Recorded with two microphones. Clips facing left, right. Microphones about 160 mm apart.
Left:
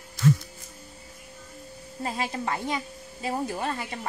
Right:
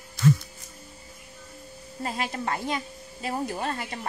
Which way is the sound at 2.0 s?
20° left (ahead or behind).